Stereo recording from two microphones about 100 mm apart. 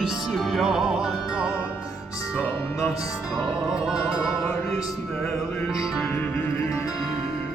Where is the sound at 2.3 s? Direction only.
20° left (ahead or behind).